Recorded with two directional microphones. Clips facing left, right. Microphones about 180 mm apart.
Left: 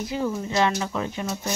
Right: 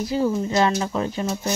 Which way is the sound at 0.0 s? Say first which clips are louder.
Right 5 dB; 35° right (ahead or behind).